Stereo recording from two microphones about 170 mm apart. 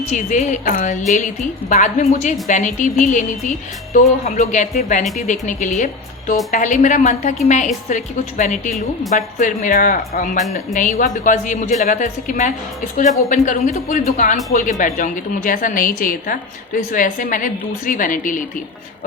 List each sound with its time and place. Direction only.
0.1 s a man's voice: 45° left (ahead or behind)